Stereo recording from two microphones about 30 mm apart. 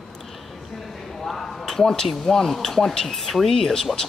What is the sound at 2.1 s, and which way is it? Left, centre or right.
Speech, centre.